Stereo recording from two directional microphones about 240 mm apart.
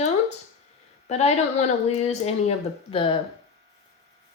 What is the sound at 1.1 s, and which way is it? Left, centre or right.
Speech, left.